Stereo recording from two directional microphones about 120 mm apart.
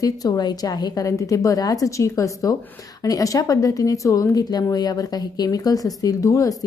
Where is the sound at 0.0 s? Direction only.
35° left (ahead or behind).